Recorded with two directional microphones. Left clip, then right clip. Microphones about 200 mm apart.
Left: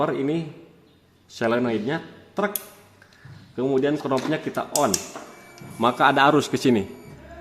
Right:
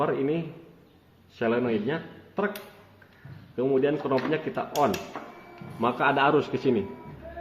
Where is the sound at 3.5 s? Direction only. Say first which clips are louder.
Left 2 dB; 45° left (ahead or behind).